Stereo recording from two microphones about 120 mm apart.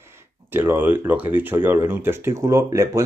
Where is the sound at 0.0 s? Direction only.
20° right (ahead or behind).